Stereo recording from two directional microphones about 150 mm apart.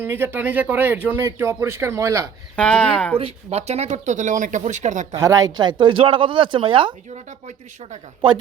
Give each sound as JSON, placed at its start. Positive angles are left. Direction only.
{"t": 0.0, "sound": "a man's voice", "side_deg": -15}
{"t": 2.6, "sound": "speech", "side_deg": 5}
{"t": 3.2, "sound": "speech", "side_deg": -45}
{"t": 5.1, "sound": "speech", "side_deg": -20}
{"t": 7.3, "sound": "speech", "side_deg": -55}